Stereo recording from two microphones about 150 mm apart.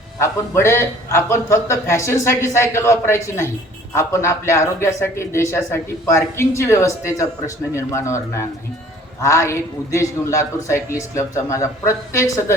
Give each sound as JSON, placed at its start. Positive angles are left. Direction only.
{"t": 0.2, "sound": "a man's voice", "side_deg": 15}